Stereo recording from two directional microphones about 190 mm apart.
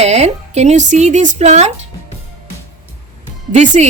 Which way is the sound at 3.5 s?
40° right (ahead or behind).